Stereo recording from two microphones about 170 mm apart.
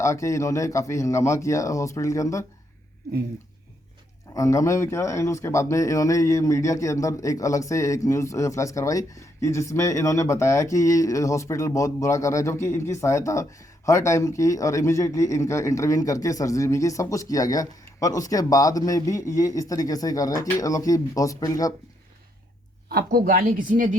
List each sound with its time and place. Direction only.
0.0 s speech: 15° left (ahead or behind)
4.4 s speech: 20° left (ahead or behind)
22.9 s speech: 65° right (ahead or behind)